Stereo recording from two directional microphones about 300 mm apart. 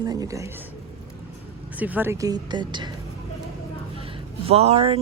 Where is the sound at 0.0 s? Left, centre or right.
Centre.